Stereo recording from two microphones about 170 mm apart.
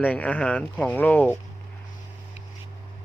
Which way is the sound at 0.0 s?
10° left (ahead or behind).